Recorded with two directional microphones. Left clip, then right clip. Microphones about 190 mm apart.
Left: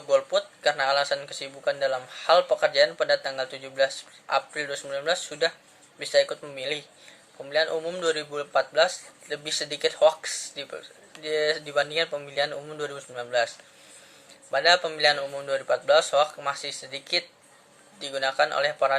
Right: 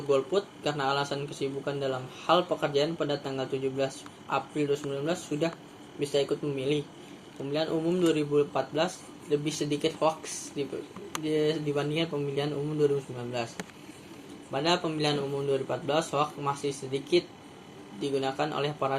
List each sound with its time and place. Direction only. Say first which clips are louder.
0.1 s speech: left 4 dB; 45° left (ahead or behind)
14.5 s speech: left 7 dB; 40° left (ahead or behind)